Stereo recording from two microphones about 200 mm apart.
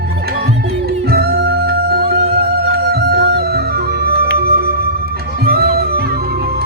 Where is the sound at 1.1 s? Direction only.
50° right (ahead or behind).